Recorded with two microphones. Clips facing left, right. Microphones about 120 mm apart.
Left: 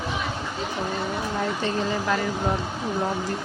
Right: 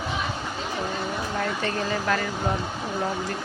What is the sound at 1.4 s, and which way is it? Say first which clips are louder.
Speech: left 2 dB; 15° left (ahead or behind).